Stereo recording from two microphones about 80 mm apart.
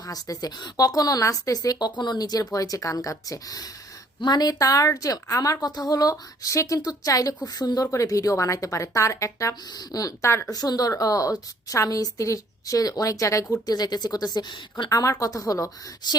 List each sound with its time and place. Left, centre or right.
0.0 s a woman's voice: left
7.9 s speech: left
10.2 s speech: left
10.5 s a woman's voice: left
14.8 s a woman's voice: left
16.0 s speech: left